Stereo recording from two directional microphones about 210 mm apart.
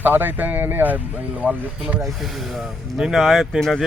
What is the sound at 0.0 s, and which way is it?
Speech, 10° right (ahead or behind).